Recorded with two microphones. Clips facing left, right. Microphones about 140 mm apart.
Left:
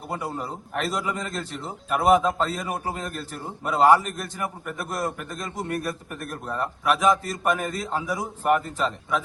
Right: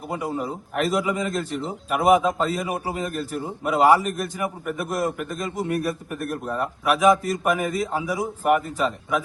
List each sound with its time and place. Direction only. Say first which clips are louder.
0.1 s a man's voice: right 3 dB; 5° right (ahead or behind)